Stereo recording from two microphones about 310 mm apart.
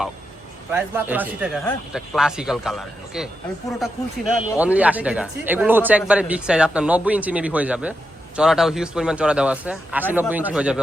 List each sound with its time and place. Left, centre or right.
0.7 s speech: centre
4.3 s speech: centre